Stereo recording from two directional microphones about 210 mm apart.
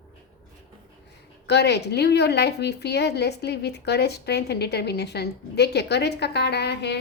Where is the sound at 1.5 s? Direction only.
55° left (ahead or behind).